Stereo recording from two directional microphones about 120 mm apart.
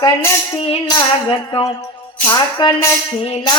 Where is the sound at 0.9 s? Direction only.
35° left (ahead or behind).